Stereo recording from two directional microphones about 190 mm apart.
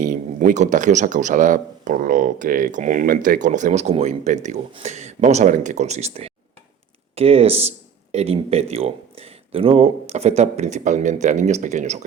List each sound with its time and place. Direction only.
0.0 s speech: 45° right (ahead or behind)